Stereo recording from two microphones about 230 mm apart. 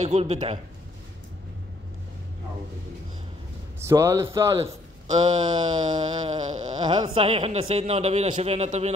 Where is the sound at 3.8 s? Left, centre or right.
Centre.